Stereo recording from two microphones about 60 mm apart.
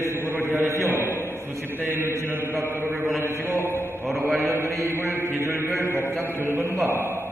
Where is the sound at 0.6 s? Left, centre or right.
Right.